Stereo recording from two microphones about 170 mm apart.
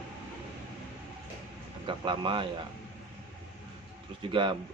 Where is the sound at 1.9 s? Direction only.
30° right (ahead or behind).